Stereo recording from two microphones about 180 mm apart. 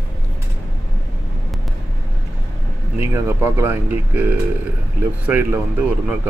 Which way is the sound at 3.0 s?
15° right (ahead or behind).